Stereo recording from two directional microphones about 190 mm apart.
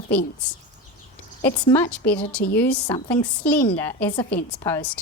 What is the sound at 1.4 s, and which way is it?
A woman's voice, 10° left (ahead or behind).